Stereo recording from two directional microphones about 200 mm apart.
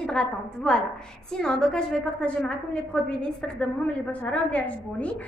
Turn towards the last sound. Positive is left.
turn(degrees=5)  # may be behind; listen again after turning